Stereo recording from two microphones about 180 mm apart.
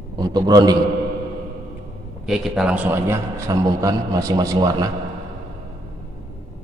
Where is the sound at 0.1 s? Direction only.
25° right (ahead or behind).